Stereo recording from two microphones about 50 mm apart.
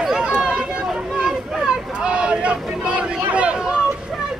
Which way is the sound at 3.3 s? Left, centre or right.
Right.